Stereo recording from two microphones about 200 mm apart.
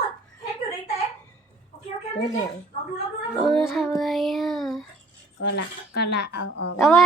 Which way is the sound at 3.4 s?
Centre (ahead or behind).